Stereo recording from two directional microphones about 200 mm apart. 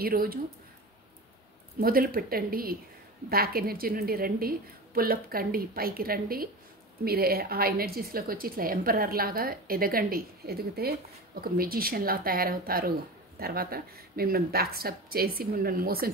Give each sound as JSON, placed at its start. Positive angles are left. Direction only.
{"t": 0.0, "sound": "a woman's voice", "side_deg": -45}
{"t": 1.8, "sound": "a woman's voice", "side_deg": -45}